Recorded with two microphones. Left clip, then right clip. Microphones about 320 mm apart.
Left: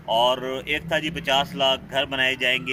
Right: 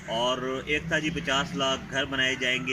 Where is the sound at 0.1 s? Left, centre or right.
Left.